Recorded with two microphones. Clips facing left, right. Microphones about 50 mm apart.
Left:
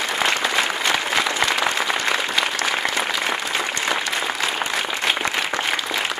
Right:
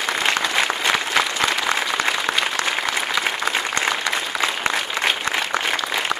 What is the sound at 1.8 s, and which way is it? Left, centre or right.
Applause, centre.